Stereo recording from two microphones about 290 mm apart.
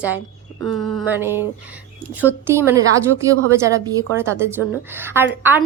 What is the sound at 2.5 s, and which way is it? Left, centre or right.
A woman's voice, centre.